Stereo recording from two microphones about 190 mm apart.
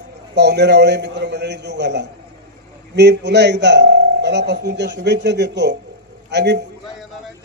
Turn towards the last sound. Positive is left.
turn(degrees=-65)  # may be behind; listen again after turning